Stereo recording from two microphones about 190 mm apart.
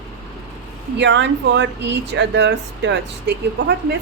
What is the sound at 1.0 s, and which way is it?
Speech, 65° right (ahead or behind).